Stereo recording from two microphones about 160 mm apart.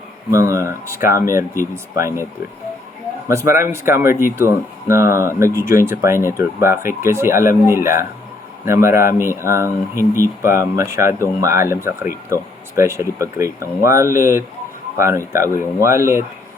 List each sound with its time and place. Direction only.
0.3 s speech: 20° right (ahead or behind)
3.2 s speech: 20° right (ahead or behind)
14.9 s speech: 15° right (ahead or behind)